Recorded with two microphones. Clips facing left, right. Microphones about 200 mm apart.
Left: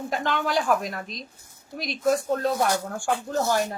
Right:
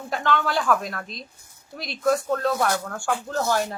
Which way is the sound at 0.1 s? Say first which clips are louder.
Right 2 dB; 15° left (ahead or behind).